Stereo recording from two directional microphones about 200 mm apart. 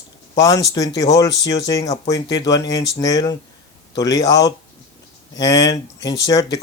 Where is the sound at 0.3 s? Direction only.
20° left (ahead or behind).